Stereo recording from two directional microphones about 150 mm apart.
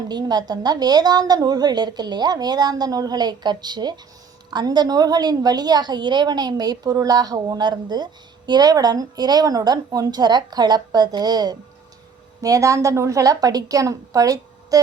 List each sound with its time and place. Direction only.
0.1 s a woman's voice: 25° right (ahead or behind)